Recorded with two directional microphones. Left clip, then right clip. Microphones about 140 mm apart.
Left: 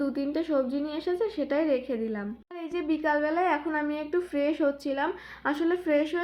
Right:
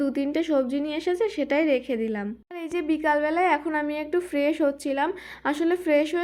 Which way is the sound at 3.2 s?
45° right (ahead or behind).